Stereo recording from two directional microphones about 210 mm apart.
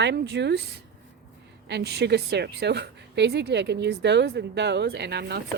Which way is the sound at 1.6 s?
55° right (ahead or behind).